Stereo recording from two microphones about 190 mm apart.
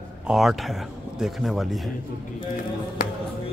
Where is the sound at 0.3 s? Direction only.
Centre (ahead or behind).